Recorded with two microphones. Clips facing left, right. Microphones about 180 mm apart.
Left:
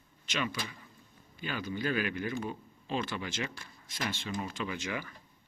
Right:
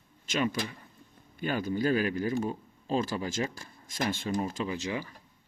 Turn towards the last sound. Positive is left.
turn(degrees=-30)  # may be behind; listen again after turning